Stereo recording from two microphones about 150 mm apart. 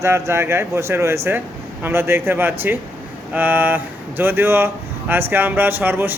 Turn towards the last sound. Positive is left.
turn(degrees=-15)  # may be behind; listen again after turning